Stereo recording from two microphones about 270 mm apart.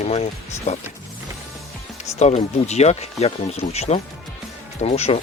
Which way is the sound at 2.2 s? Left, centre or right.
Left.